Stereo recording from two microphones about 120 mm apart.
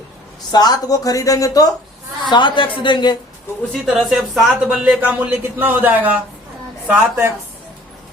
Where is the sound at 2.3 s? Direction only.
40° left (ahead or behind).